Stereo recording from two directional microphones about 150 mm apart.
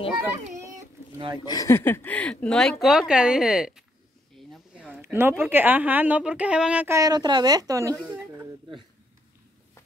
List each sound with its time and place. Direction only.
1.4 s speech: 25° left (ahead or behind); by 3.8 s 5° right (ahead or behind)
4.5 s a sound: 5° right (ahead or behind)
5.4 s a woman's voice: 15° right (ahead or behind)
7.0 s a woman's voice: 25° right (ahead or behind)